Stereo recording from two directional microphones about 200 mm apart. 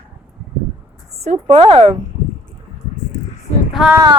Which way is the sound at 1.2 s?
30° right (ahead or behind).